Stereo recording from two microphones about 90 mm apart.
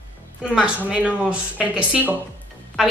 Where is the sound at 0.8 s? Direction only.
15° right (ahead or behind).